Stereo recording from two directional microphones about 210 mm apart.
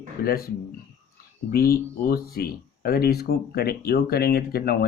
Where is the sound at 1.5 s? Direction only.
45° left (ahead or behind).